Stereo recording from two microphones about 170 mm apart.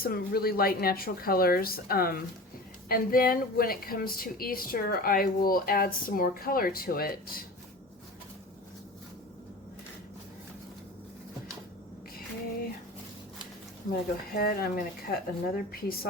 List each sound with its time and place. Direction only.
0.0 s a woman's voice: 60° left (ahead or behind)
14.3 s a woman's voice: 65° left (ahead or behind)